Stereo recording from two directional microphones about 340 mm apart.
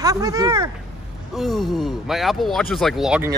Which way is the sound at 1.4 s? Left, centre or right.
Centre.